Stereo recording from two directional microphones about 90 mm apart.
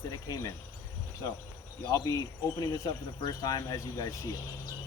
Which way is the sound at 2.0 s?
45° left (ahead or behind).